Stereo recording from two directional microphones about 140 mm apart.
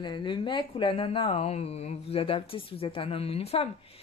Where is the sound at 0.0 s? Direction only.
35° left (ahead or behind).